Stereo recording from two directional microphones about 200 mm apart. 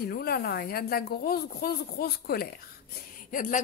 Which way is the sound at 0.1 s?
50° left (ahead or behind).